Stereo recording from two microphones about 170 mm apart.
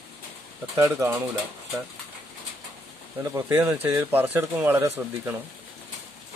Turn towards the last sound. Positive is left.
turn(degrees=-15)  # may be behind; listen again after turning